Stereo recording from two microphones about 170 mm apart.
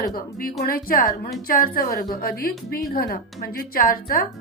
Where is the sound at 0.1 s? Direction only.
60° left (ahead or behind).